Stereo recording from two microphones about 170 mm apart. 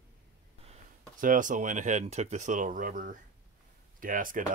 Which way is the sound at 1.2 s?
50° right (ahead or behind).